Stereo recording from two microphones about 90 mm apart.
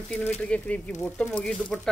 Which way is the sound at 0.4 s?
15° left (ahead or behind).